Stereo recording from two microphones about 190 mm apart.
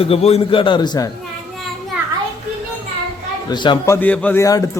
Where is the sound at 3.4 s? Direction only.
25° left (ahead or behind).